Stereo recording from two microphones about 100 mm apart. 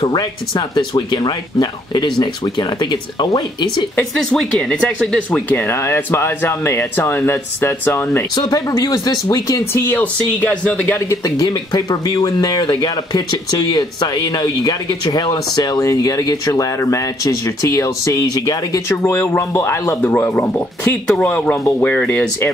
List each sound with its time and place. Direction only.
0.0 s speech: 40° left (ahead or behind)
4.0 s speech: 5° left (ahead or behind)
5.5 s speech: 20° left (ahead or behind)
8.4 s speech: 35° left (ahead or behind)
9.7 s speech: 25° left (ahead or behind)
11.1 s speech: 35° left (ahead or behind)
11.4 s speech: 45° left (ahead or behind); by 20.1 s 25° left (ahead or behind)
20.3 s speech: 15° left (ahead or behind)